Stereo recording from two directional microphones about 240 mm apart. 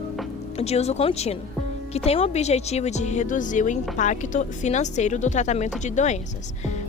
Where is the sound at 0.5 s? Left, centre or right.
Left.